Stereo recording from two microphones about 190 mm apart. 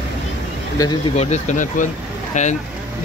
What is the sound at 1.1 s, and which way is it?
Speech, 35° left (ahead or behind).